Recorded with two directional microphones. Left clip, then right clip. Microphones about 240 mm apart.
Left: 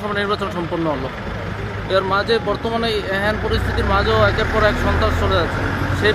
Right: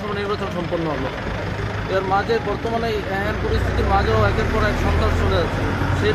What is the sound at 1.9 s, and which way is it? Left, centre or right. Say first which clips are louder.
Speech: left 3 dB; left.